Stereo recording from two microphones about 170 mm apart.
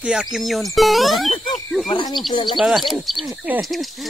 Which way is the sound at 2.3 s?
25° left (ahead or behind).